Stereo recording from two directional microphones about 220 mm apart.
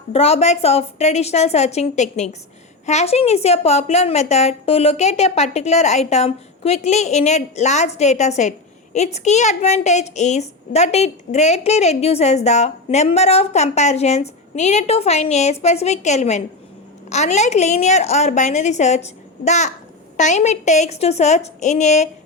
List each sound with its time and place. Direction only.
0.1 s a woman's voice: 30° left (ahead or behind)